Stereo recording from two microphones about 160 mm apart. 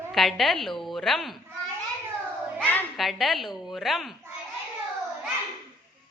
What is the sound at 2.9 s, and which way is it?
A woman's voice, centre (ahead or behind).